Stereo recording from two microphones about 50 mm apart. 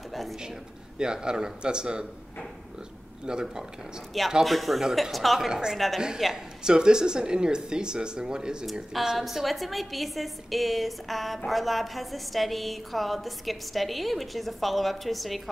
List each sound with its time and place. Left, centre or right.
0.9 s speech: centre
3.3 s speech: centre
4.1 s a woman's voice: centre
5.5 s a woman's voice: centre